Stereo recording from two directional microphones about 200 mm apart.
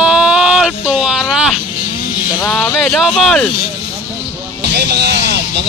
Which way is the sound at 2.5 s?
5° left (ahead or behind).